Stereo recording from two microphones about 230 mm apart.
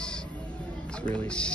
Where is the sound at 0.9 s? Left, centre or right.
Centre.